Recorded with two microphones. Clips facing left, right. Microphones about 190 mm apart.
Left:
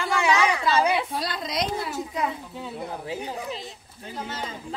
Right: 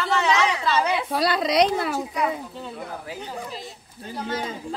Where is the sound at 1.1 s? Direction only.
70° right (ahead or behind).